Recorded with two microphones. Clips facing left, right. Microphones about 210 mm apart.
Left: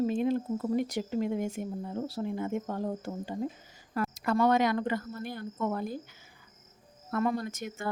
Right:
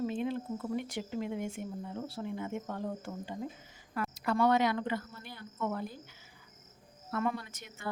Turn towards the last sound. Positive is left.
turn(degrees=45)  # may be behind; listen again after turning